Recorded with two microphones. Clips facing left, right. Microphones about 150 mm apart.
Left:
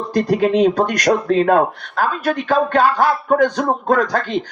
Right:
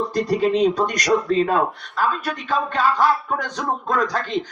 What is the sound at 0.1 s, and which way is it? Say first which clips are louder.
Speech: left 7 dB; 60° left (ahead or behind).